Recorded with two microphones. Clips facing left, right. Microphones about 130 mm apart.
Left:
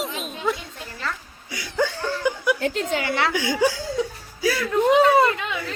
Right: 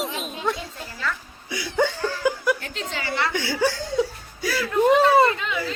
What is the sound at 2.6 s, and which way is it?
Speech, 55° left (ahead or behind).